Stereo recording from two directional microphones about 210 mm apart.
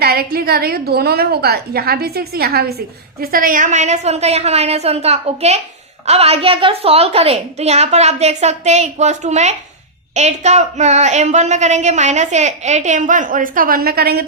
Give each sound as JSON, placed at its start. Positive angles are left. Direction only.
{"t": 0.0, "sound": "a woman's voice", "side_deg": -45}